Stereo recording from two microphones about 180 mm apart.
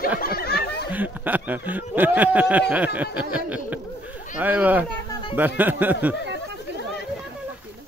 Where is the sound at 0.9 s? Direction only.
10° right (ahead or behind).